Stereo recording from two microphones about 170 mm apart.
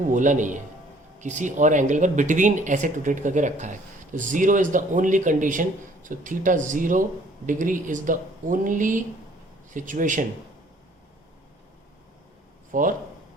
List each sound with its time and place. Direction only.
0.0 s speech: 50° right (ahead or behind)
12.7 s speech: 50° right (ahead or behind)